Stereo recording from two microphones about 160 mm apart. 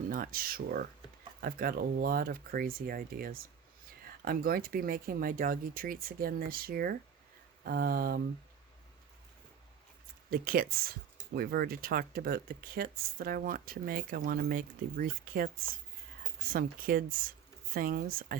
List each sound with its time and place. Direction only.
0.1 s speech: 60° right (ahead or behind)
7.6 s a sound: 70° right (ahead or behind)
10.2 s speech: 65° right (ahead or behind)
16.5 s speech: 65° right (ahead or behind)